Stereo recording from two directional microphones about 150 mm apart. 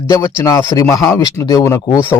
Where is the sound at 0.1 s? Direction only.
20° left (ahead or behind).